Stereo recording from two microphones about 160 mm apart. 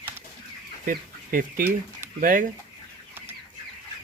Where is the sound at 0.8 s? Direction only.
60° right (ahead or behind).